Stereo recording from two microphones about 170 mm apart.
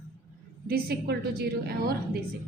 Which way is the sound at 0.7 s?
65° right (ahead or behind).